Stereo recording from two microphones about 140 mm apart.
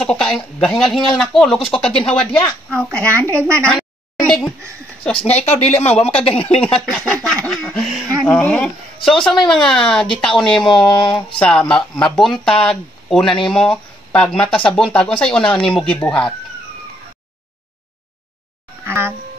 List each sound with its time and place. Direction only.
0.0 s speech: 5° left (ahead or behind)
3.1 s speech: 20° right (ahead or behind)
4.2 s speech: 5° left (ahead or behind)
5.3 s speech: 50° left (ahead or behind)
6.6 s speech: 5° left (ahead or behind)
11.1 s a sound: 35° left (ahead or behind)
11.3 s speech: 5° left (ahead or behind)
18.9 s a woman's voice: 15° right (ahead or behind)